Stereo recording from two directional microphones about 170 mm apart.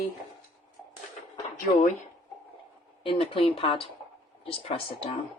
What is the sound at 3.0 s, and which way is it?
Speech, 35° left (ahead or behind).